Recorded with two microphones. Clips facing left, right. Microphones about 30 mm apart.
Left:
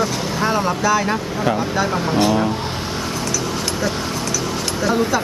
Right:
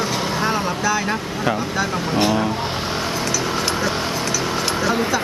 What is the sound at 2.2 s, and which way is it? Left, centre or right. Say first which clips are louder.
Speech: left 1 dB; centre.